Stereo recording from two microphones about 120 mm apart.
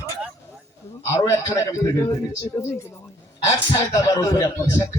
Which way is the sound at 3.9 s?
30° left (ahead or behind).